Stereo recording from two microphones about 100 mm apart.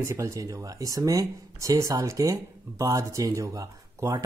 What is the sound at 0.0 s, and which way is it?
Speech, 30° right (ahead or behind).